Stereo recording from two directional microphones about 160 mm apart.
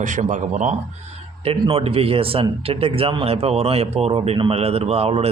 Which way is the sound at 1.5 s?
35° right (ahead or behind).